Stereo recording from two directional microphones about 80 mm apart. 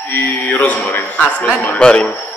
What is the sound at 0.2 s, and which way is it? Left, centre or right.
A man's voice, centre.